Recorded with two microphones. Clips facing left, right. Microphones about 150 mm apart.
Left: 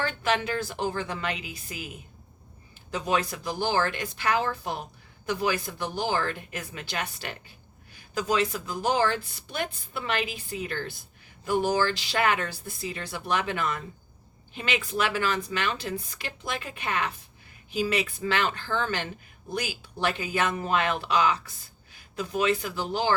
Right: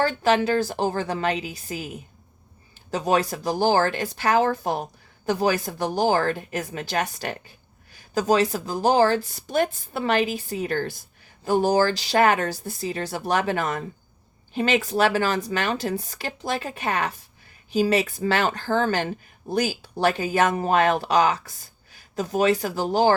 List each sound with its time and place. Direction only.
0.0 s speech: 35° right (ahead or behind)
2.9 s speech: 35° right (ahead or behind)